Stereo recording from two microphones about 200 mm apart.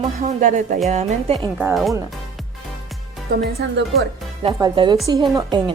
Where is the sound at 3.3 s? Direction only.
50° right (ahead or behind).